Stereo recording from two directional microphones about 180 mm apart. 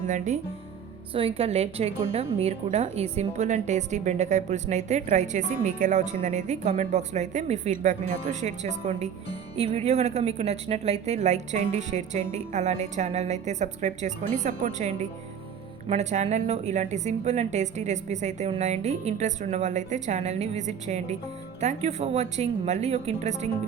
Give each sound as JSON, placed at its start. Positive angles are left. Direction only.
{"t": 1.1, "sound": "a woman's voice", "side_deg": -30}